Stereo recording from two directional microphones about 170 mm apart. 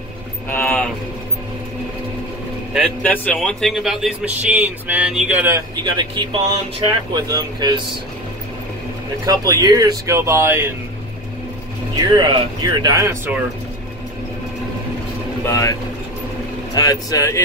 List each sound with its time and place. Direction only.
0.5 s a sound: 10° left (ahead or behind)
3.0 s speech: 10° left (ahead or behind); by 5.6 s 10° right (ahead or behind)
5.9 s speech: 30° right (ahead or behind)
9.2 s speech: 20° right (ahead or behind)
12.0 s speech: 25° right (ahead or behind)
15.4 s speech: 15° left (ahead or behind)
16.7 s speech: 20° left (ahead or behind)